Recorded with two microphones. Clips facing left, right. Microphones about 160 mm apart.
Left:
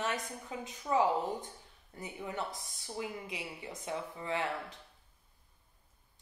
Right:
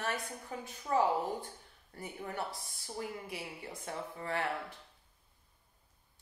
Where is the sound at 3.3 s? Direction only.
20° left (ahead or behind).